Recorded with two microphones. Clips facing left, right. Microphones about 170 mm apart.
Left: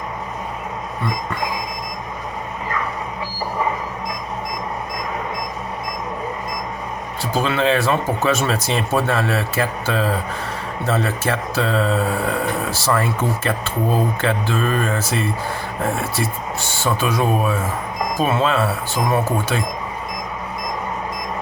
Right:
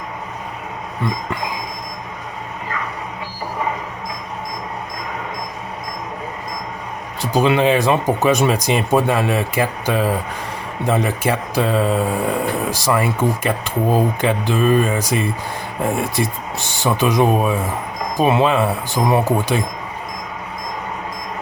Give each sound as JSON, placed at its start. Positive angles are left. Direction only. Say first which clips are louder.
{"t": 7.2, "sound": "speech", "louder": "right 4 dB", "side_deg": -15}